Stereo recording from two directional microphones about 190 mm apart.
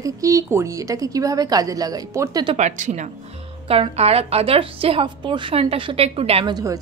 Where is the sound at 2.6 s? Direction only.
40° right (ahead or behind).